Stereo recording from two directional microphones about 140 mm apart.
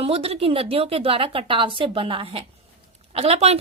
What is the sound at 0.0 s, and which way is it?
A woman's voice, 45° right (ahead or behind).